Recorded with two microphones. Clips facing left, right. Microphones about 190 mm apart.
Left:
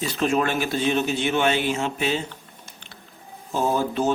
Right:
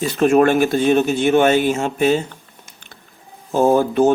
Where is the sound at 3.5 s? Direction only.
50° right (ahead or behind).